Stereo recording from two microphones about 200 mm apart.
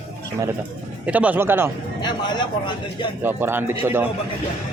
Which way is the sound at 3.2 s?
10° right (ahead or behind).